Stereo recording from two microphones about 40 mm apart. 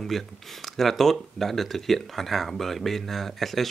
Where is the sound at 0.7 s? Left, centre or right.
Centre.